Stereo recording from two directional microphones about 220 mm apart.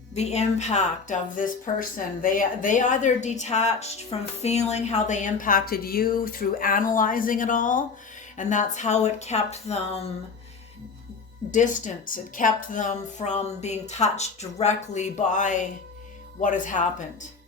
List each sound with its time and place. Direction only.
0.1 s a woman's voice: 30° left (ahead or behind)
11.5 s a woman's voice: 35° left (ahead or behind)